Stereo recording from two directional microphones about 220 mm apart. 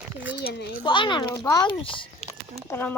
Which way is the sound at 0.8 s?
20° left (ahead or behind).